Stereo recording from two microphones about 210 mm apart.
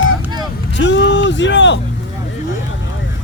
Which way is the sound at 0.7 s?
60° left (ahead or behind).